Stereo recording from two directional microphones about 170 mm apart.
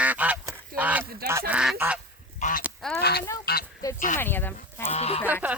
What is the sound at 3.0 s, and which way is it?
Honk, 70° left (ahead or behind).